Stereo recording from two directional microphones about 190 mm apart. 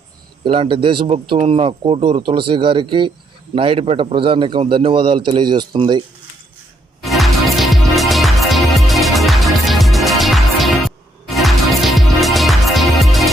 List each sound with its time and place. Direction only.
0.4 s speech: 30° right (ahead or behind)
7.0 s music: centre (ahead or behind)